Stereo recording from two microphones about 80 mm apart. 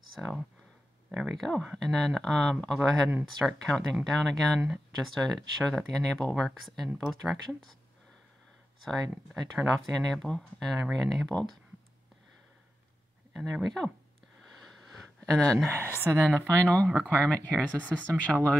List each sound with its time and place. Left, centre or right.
0.1 s speech: centre
8.8 s speech: centre
13.3 s speech: centre
14.4 s sniff: centre
16.1 s speech: right
16.4 s speech: centre